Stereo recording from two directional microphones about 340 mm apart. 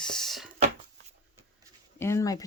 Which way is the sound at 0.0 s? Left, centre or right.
Centre.